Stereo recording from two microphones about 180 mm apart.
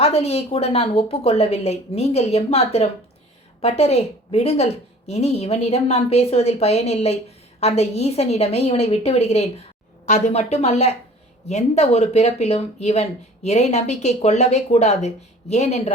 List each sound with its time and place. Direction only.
0.0 s speech: 35° left (ahead or behind)